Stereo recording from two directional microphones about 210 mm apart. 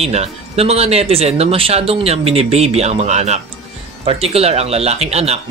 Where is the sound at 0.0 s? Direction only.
30° right (ahead or behind).